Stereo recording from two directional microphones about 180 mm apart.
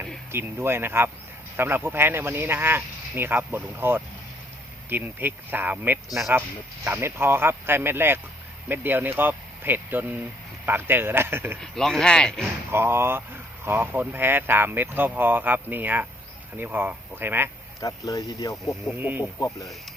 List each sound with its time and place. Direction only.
0.3 s speech: 15° right (ahead or behind)
11.6 s speech: centre (ahead or behind)
12.7 s speech: 15° right (ahead or behind)
17.7 s speech: 20° left (ahead or behind)
18.9 s speech: 10° right (ahead or behind)
19.4 s speech: 20° left (ahead or behind)